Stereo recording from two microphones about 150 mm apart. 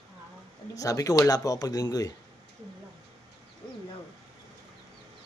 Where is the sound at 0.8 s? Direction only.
20° left (ahead or behind).